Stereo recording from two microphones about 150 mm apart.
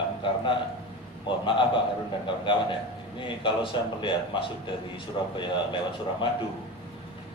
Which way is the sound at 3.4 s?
35° left (ahead or behind).